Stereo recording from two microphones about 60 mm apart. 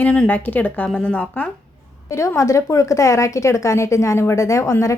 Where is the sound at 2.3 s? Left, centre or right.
Left.